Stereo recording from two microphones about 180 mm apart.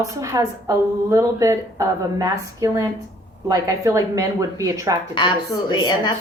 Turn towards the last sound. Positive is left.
turn(degrees=25)  # may be behind; listen again after turning